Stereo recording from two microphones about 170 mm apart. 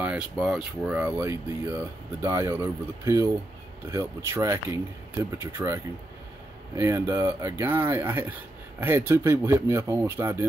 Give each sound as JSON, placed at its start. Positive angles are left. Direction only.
{"t": 0.0, "sound": "speech", "side_deg": -5}
{"t": 6.8, "sound": "speech", "side_deg": -15}